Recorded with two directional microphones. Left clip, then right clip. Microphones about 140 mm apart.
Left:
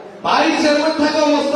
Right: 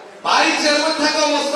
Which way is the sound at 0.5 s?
10° left (ahead or behind).